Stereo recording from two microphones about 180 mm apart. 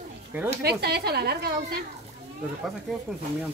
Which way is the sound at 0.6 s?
65° right (ahead or behind).